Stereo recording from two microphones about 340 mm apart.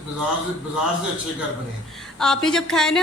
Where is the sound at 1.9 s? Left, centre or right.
Centre.